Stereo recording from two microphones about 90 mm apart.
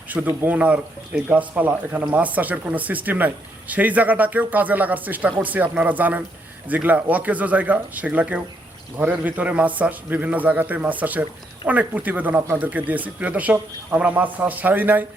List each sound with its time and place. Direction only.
0.1 s speech: 20° right (ahead or behind)